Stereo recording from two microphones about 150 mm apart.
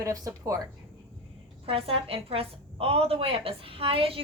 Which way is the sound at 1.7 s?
40° right (ahead or behind).